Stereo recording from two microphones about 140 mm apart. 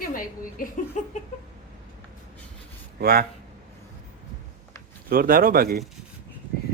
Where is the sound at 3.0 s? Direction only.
90° right.